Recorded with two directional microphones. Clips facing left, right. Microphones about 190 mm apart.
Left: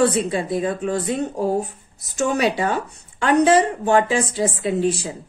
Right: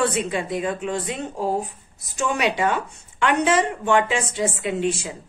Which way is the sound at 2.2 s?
40° left (ahead or behind).